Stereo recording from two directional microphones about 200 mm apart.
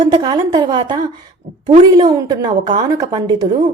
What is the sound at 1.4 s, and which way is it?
Speech, 40° right (ahead or behind).